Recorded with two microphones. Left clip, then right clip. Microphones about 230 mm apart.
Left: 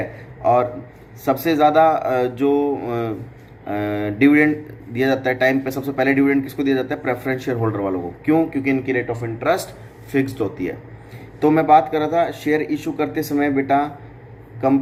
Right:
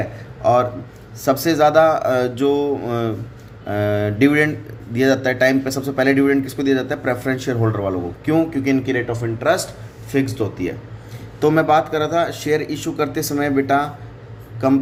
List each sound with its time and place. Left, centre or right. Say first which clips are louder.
0.4 s speech: right 1 dB; right
11.3 s speech: left 1 dB; right